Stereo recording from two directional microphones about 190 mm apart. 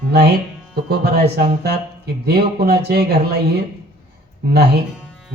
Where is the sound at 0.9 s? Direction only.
55° right (ahead or behind).